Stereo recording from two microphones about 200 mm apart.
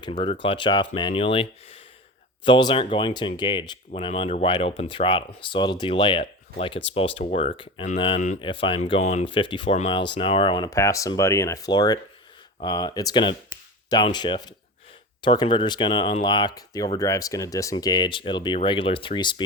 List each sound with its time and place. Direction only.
0.2 s speech: 25° left (ahead or behind)